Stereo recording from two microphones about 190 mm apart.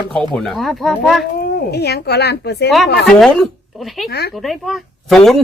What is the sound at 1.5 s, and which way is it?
Speech, 60° left (ahead or behind).